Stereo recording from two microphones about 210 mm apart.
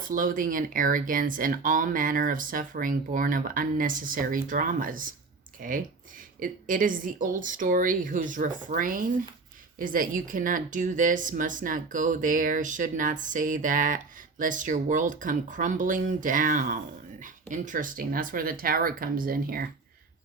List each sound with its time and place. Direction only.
0.1 s speech: 40° right (ahead or behind)